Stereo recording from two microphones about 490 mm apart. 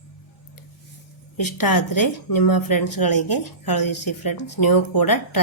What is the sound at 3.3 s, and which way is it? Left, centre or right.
Speech, left.